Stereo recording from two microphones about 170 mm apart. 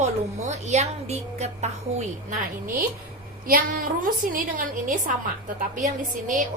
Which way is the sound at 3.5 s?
55° right (ahead or behind).